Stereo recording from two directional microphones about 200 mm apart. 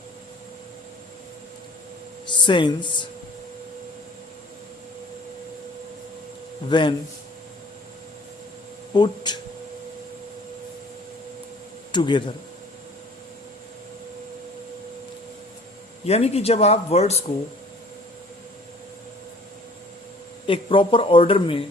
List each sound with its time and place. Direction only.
2.2 s speech: 25° left (ahead or behind)
6.7 s speech: 25° left (ahead or behind)
8.9 s speech: 20° left (ahead or behind)
11.9 s speech: 25° left (ahead or behind)
16.0 s speech: 30° left (ahead or behind)
20.5 s speech: 25° left (ahead or behind)